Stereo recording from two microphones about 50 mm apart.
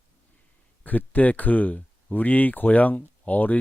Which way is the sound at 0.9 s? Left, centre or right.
Left.